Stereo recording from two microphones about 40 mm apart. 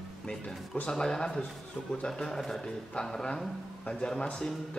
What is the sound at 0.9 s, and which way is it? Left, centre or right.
Speech, centre.